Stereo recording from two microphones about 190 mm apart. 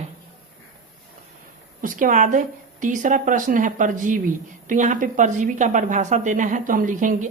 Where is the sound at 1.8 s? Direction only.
45° right (ahead or behind).